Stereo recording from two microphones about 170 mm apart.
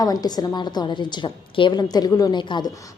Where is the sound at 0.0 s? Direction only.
20° left (ahead or behind).